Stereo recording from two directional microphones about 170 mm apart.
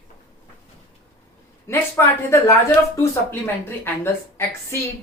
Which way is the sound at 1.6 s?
15° left (ahead or behind).